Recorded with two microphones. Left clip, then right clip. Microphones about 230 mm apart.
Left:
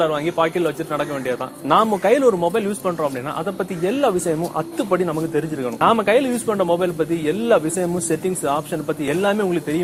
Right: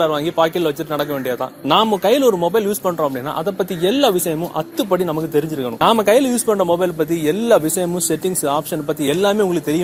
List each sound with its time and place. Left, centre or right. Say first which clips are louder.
0.0 s a man's voice: right 3 dB; right
4.5 s speech: right 2 dB; right